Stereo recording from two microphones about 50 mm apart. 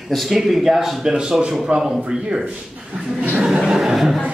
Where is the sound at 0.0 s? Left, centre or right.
Centre.